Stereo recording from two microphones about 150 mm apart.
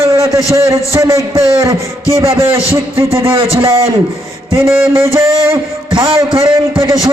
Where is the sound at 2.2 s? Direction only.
40° right (ahead or behind).